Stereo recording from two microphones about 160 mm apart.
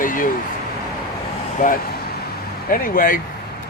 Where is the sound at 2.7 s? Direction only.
60° left (ahead or behind).